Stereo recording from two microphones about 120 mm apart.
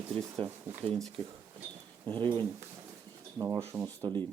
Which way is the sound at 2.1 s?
40° right (ahead or behind).